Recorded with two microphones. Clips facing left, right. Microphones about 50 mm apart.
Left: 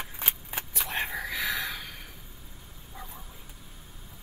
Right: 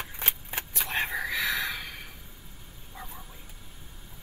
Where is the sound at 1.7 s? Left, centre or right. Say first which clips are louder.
Right 2 dB; centre.